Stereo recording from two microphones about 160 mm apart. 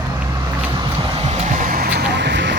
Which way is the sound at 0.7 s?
30° right (ahead or behind).